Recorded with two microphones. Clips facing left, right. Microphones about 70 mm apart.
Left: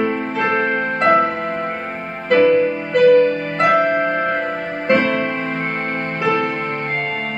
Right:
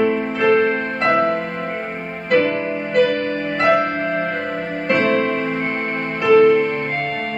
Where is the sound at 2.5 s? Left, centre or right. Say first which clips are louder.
Left 6 dB; centre.